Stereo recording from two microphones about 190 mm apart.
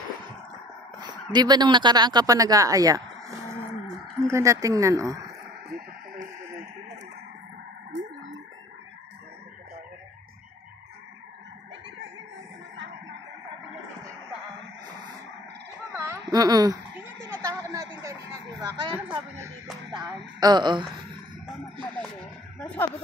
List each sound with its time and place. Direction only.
1.3 s speech: 20° right (ahead or behind)
15.9 s a sound: 15° right (ahead or behind)
19.3 s speech: 15° right (ahead or behind)